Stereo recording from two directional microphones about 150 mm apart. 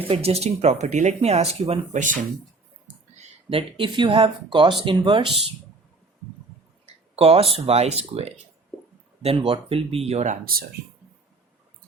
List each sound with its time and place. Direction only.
0.1 s speech: 45° right (ahead or behind)
3.5 s speech: 35° right (ahead or behind)
6.8 s a sound: 40° right (ahead or behind)
7.5 s speech: 45° right (ahead or behind)